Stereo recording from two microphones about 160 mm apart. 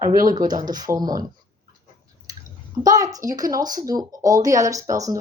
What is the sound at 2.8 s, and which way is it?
Speech, 20° right (ahead or behind).